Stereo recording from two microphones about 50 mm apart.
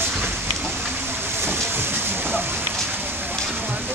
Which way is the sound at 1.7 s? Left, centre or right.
Right.